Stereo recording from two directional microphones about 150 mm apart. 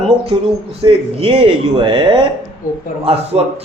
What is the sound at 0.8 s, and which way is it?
Speech, 35° right (ahead or behind).